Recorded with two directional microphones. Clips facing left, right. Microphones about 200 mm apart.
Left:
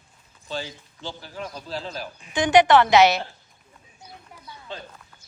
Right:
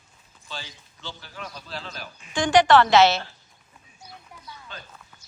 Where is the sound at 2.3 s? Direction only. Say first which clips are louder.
Left 1 dB; 20° left (ahead or behind).